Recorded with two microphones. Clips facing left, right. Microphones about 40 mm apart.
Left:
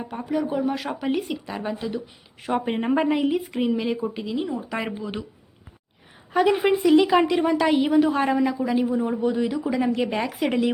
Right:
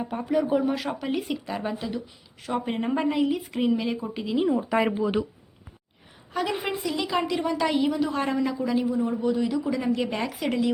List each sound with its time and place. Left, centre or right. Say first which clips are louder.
0.0 s speech: right 1 dB; centre
2.0 s a woman's voice: left 1 dB; left; by 5.2 s centre
6.3 s a woman's voice: left 8 dB; centre
6.8 s a woman's voice: left 15 dB; left
7.1 s a woman's voice: left 6 dB; centre
8.2 s a woman's voice: left 4 dB; centre
10.4 s a woman's voice: left 3 dB; left